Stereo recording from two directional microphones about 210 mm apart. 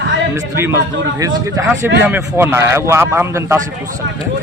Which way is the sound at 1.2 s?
15° right (ahead or behind).